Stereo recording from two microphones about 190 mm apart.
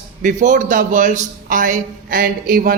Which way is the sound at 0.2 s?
40° right (ahead or behind).